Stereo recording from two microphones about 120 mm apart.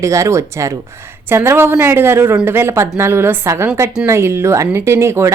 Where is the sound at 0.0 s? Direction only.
25° right (ahead or behind).